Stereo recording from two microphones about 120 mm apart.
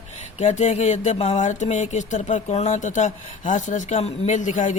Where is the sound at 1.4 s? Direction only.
90° left.